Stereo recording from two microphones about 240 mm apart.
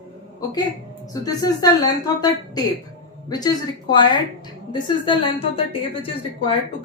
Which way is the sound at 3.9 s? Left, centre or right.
Centre.